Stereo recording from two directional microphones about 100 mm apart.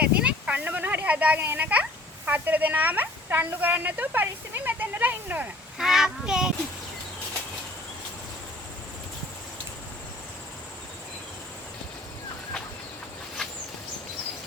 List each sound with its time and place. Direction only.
0.0 s speech: 10° right (ahead or behind)
5.7 s speech: 5° right (ahead or behind)